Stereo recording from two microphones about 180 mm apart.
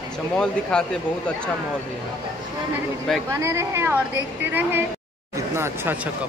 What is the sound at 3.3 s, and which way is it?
Speech, 15° right (ahead or behind).